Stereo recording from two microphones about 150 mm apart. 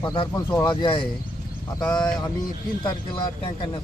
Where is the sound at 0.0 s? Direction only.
30° left (ahead or behind).